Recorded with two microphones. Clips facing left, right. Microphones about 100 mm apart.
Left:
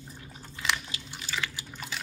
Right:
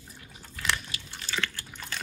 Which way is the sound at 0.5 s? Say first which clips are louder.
Even; 20° left (ahead or behind).